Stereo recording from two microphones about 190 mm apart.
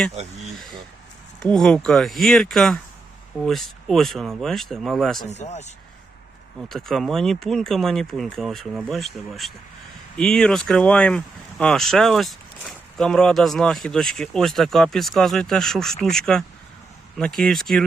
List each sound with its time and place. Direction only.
1.4 s speech: 5° left (ahead or behind)
5.3 s speech: 35° left (ahead or behind)
6.6 s speech: centre (ahead or behind)